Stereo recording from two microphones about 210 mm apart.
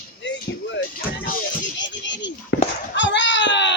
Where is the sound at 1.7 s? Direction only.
60° left (ahead or behind).